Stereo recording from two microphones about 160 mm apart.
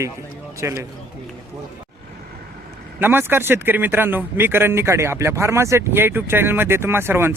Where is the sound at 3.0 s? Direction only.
15° right (ahead or behind).